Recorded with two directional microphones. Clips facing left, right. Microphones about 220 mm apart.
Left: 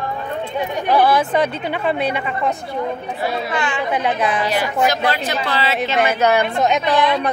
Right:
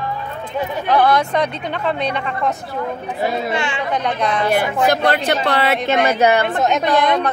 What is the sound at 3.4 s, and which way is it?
Speech, 25° right (ahead or behind).